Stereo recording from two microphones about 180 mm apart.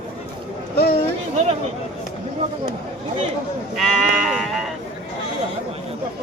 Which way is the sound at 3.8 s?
Centre (ahead or behind).